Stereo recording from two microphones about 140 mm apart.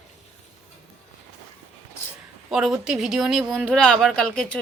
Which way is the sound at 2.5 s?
5° right (ahead or behind).